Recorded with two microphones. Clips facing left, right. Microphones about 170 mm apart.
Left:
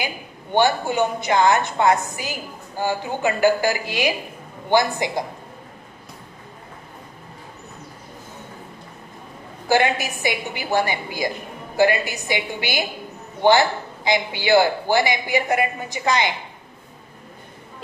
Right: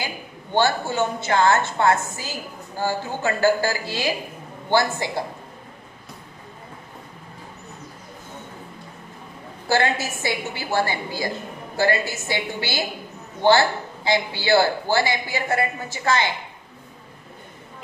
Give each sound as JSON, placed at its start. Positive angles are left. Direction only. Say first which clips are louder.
{"t": 0.0, "sound": "a woman's voice", "louder": "left 2 dB", "side_deg": 15}
{"t": 9.7, "sound": "a woman's voice", "louder": "left 2 dB", "side_deg": 15}